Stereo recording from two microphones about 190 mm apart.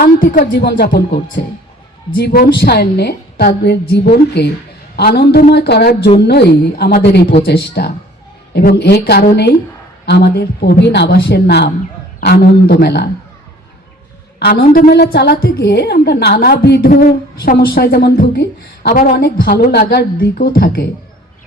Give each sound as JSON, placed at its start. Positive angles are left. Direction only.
{"t": 0.0, "sound": "a woman's voice", "side_deg": 50}
{"t": 14.3, "sound": "a woman's voice", "side_deg": 55}